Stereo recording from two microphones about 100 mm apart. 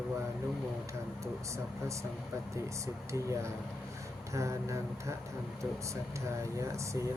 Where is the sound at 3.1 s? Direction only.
30° right (ahead or behind).